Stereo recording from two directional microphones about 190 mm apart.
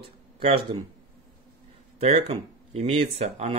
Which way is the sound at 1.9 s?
35° right (ahead or behind).